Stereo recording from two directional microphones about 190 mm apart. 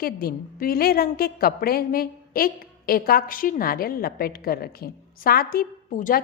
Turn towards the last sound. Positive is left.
turn(degrees=45)  # may be behind; listen again after turning